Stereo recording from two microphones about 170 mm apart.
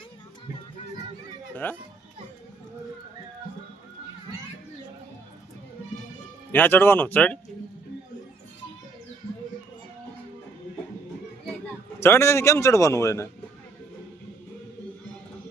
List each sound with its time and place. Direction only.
1.6 s a man's voice: 10° left (ahead or behind)
6.5 s a man's voice: 10° left (ahead or behind)
11.9 s a man's voice: 15° left (ahead or behind)